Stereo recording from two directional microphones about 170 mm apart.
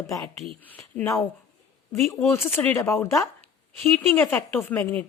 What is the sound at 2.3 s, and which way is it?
Speech, 15° left (ahead or behind).